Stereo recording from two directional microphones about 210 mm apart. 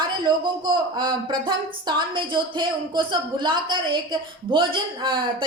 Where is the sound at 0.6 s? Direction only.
20° right (ahead or behind).